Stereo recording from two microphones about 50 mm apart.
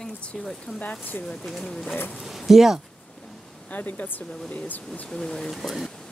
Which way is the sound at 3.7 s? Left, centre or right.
Left.